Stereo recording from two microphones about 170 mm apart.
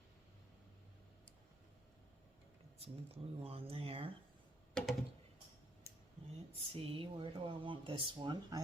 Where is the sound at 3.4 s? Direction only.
35° right (ahead or behind).